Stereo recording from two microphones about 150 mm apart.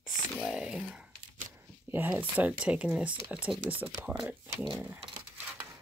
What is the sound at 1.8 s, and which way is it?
Speech, 10° right (ahead or behind).